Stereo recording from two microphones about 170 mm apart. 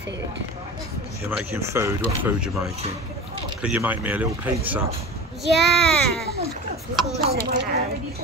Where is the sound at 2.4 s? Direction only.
5° right (ahead or behind).